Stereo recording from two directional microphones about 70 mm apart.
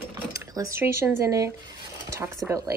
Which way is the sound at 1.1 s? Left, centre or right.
Right.